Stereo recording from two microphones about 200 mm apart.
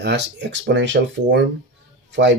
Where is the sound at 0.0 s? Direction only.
55° right (ahead or behind).